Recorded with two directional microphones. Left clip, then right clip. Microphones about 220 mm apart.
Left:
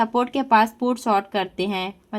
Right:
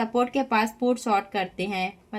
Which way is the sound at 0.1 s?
45° left (ahead or behind).